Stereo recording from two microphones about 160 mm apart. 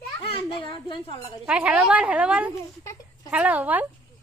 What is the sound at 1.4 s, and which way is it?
A woman's voice, 5° right (ahead or behind).